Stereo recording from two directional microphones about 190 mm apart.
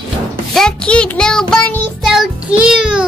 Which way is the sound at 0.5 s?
5° left (ahead or behind).